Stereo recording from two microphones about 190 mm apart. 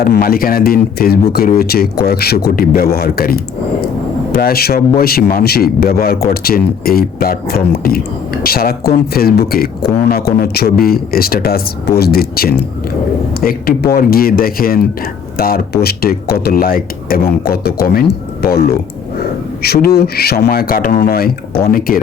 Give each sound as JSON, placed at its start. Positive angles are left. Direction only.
{"t": 0.0, "sound": "speech", "side_deg": 50}